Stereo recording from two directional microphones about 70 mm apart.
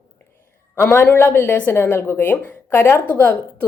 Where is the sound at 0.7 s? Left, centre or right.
Left.